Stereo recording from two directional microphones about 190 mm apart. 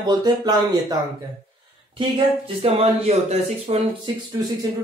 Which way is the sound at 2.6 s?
30° right (ahead or behind).